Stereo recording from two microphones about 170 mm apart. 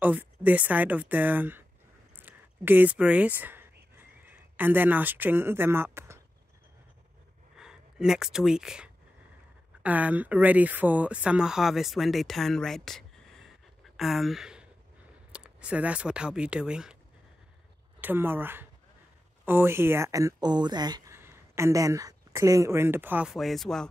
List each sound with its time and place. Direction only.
0.0 s a woman's voice: 10° right (ahead or behind)
2.1 s a sound: 10° right (ahead or behind)
7.5 s speech: 5° right (ahead or behind)
18.0 s a woman's voice: 10° right (ahead or behind)